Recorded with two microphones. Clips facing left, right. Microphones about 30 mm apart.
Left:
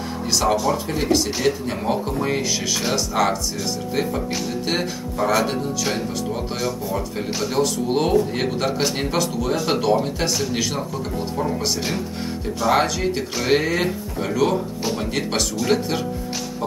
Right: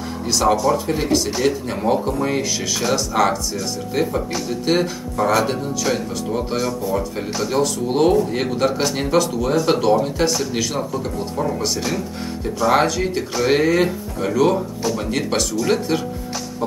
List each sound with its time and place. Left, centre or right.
0.3 s speech: centre
11.6 s speech: centre
14.8 s speech: centre
15.0 s speech: centre